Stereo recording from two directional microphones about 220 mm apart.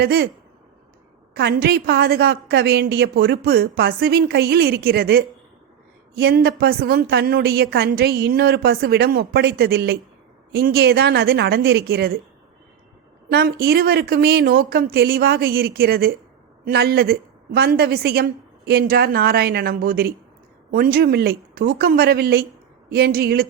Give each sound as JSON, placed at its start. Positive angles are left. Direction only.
{"t": 0.0, "sound": "a woman's voice", "side_deg": -45}
{"t": 1.4, "sound": "a woman's voice", "side_deg": -50}
{"t": 13.3, "sound": "a woman's voice", "side_deg": -45}